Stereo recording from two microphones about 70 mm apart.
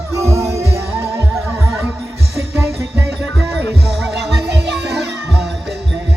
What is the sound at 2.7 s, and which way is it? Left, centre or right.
Music, centre.